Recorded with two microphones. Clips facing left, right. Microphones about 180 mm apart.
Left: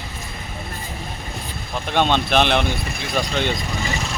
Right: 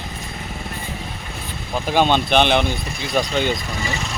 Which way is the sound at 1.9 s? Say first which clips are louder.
Right 2 dB; 5° right (ahead or behind).